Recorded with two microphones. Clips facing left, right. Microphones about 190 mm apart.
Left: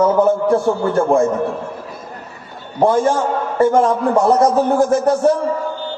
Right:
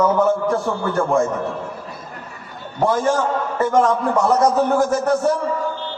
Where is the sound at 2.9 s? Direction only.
35° left (ahead or behind).